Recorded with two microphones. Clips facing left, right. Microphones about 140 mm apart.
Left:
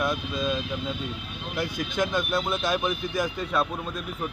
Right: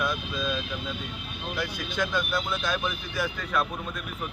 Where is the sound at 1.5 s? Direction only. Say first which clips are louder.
Left 4 dB; 25° left (ahead or behind).